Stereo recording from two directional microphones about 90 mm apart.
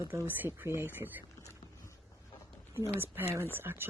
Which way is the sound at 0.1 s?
25° right (ahead or behind).